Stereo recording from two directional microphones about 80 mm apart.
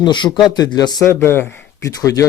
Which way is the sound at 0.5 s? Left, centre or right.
Left.